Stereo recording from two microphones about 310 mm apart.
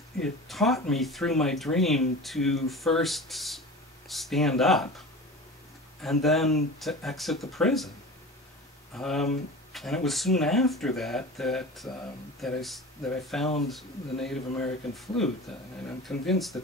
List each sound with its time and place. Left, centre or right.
0.2 s speech: centre
6.0 s speech: centre
8.9 s speech: centre